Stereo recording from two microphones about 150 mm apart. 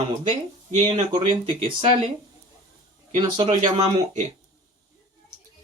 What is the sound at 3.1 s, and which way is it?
Speech, 45° right (ahead or behind).